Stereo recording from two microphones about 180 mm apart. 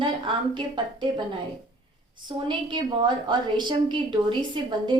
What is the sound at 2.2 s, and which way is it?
A woman's voice, 25° right (ahead or behind).